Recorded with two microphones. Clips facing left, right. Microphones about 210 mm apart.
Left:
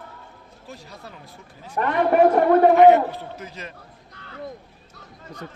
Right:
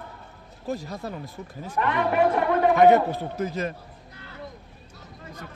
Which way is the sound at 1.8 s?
40° left (ahead or behind).